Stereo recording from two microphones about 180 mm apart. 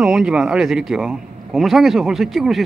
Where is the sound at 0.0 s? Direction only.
5° right (ahead or behind).